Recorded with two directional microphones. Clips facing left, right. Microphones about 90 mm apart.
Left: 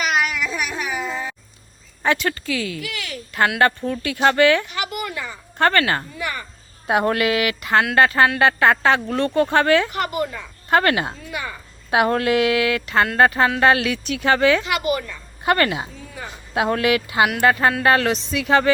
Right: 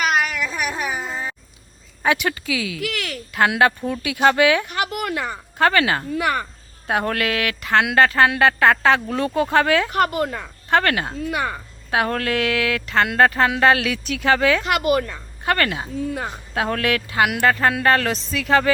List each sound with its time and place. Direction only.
0.1 s a sound: 40° right (ahead or behind)
2.0 s speech: 15° right (ahead or behind)
2.8 s a woman's voice: 60° right (ahead or behind)
3.6 s speech: 10° right (ahead or behind)
4.7 s a sound: 55° right (ahead or behind)
5.5 s speech: 5° right (ahead or behind)
6.1 s a woman's voice: 60° right (ahead or behind)
6.8 s speech: 10° left (ahead or behind)
9.9 s a woman's voice: 55° right (ahead or behind)
10.7 s speech: 5° left (ahead or behind)
14.6 s speech: 50° right (ahead or behind)
15.4 s speech: 10° left (ahead or behind)